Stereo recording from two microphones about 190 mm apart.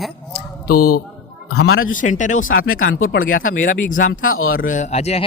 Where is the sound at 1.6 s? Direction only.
90° left.